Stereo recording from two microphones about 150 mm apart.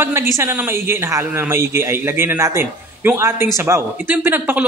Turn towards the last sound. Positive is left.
turn(degrees=-15)  # may be behind; listen again after turning